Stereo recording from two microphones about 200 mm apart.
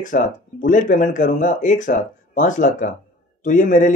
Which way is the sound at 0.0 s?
40° left (ahead or behind).